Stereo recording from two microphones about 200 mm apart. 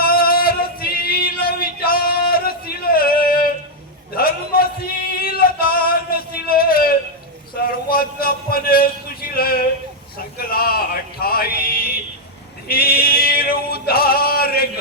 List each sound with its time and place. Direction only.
0.0 s music: 50° left (ahead or behind)
4.1 s male singing: 50° left (ahead or behind)
7.5 s a sound: 50° left (ahead or behind)
12.6 s singing: 50° left (ahead or behind)